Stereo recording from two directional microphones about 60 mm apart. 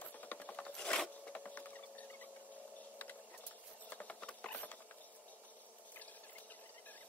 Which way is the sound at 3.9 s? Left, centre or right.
Left.